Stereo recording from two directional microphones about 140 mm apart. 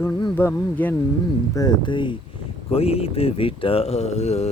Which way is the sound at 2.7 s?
45° left (ahead or behind).